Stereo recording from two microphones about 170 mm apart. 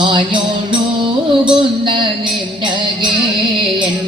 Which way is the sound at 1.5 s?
30° right (ahead or behind).